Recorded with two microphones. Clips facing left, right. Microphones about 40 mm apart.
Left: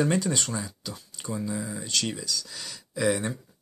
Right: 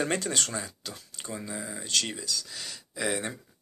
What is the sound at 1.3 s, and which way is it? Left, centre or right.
Speech, centre.